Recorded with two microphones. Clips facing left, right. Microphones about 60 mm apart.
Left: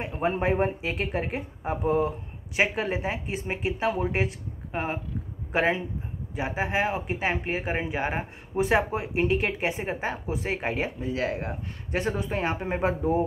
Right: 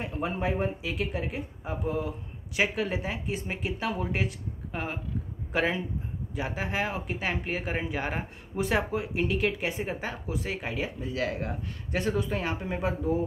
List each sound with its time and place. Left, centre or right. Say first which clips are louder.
0.0 s speech: left 4 dB; left